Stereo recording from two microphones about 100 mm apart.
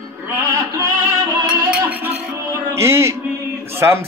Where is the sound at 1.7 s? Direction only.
20° right (ahead or behind).